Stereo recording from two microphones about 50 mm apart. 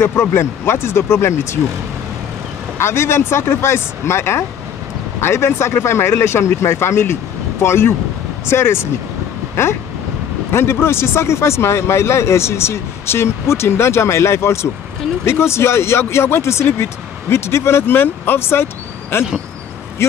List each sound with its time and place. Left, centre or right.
0.0 s speech: left
2.8 s speech: left
10.5 s speech: left
16.6 s speech: left
17.9 s speech: left